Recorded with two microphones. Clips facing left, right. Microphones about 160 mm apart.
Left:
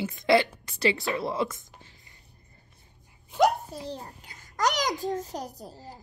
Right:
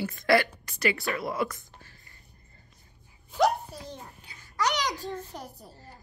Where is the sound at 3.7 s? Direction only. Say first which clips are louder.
Left 5 dB; 25° left (ahead or behind).